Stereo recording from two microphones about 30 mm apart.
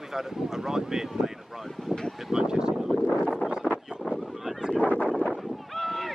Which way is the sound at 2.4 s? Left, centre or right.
Right.